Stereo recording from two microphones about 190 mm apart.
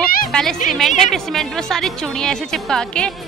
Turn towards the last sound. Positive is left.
turn(degrees=5)  # may be behind; listen again after turning